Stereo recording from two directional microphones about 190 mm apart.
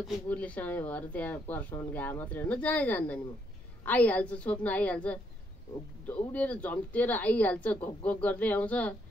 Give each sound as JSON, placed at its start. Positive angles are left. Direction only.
{"t": 0.0, "sound": "speech", "side_deg": 5}